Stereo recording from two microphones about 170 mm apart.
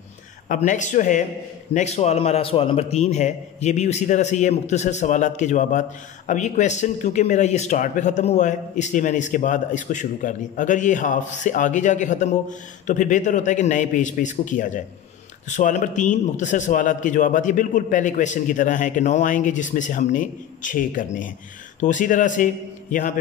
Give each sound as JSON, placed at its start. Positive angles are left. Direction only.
{"t": 0.5, "sound": "a man's voice", "side_deg": 45}